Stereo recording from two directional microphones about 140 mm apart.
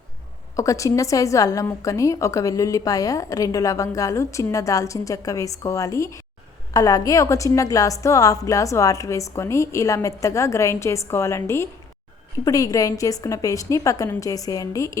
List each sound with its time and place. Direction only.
0.5 s a woman's voice: 25° left (ahead or behind)